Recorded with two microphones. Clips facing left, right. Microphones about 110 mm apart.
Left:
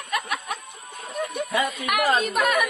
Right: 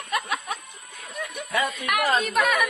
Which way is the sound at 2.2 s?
5° left (ahead or behind).